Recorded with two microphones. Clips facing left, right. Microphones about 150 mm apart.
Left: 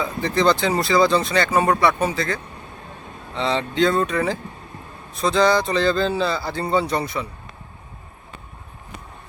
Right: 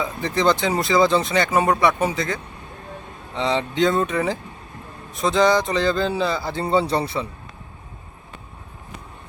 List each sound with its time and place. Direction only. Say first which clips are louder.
0.0 s speech: left 1 dB; 15° right (ahead or behind)